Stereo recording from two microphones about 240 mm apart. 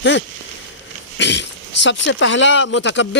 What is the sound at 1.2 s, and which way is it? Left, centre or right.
Speech, left.